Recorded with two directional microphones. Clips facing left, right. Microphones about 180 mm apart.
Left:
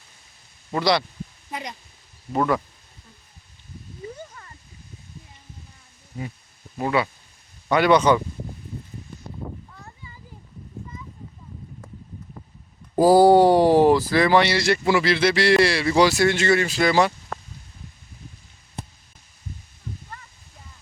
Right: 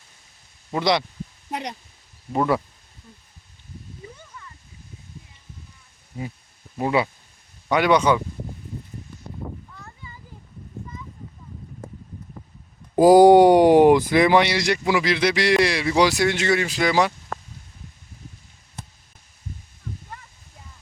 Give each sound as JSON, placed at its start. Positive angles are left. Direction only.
{"t": 0.7, "sound": "speech", "side_deg": -20}
{"t": 1.5, "sound": "speech", "side_deg": -65}
{"t": 2.3, "sound": "speech", "side_deg": -10}
{"t": 4.3, "sound": "a sound", "side_deg": 50}
{"t": 6.8, "sound": "speech", "side_deg": -20}
{"t": 13.0, "sound": "speech", "side_deg": -15}